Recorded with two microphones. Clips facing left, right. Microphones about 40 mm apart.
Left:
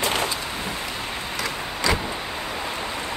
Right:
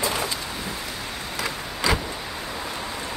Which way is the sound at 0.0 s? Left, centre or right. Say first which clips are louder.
Left 2 dB; left.